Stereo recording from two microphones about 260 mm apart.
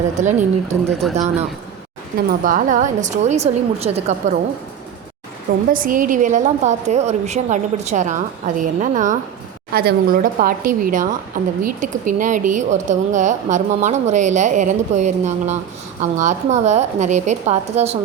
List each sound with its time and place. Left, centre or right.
0.2 s speech: right
1.0 s speech: centre
2.1 s speech: right
5.7 s speech: right